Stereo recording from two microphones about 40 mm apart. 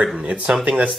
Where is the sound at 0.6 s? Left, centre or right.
Right.